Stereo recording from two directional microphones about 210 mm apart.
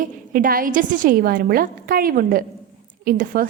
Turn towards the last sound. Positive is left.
turn(degrees=-45)  # may be behind; listen again after turning